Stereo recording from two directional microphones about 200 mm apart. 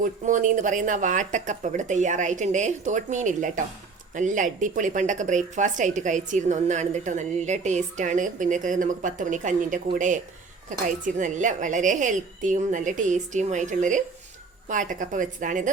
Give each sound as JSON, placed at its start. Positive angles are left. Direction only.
{"t": 0.0, "sound": "speech", "side_deg": -40}